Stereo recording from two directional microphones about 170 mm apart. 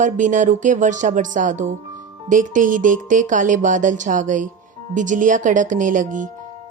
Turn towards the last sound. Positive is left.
turn(degrees=-50)  # may be behind; listen again after turning